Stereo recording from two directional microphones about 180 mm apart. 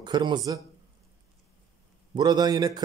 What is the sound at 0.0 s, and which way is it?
Speech, 25° right (ahead or behind).